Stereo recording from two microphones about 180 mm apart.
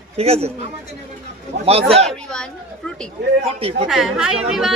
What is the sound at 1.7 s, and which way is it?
Speech, 35° right (ahead or behind).